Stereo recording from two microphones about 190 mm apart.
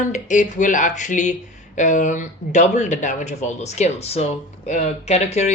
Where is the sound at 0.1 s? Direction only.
40° left (ahead or behind).